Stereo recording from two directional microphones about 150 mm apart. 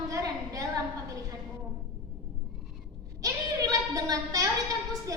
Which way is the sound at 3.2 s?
25° right (ahead or behind).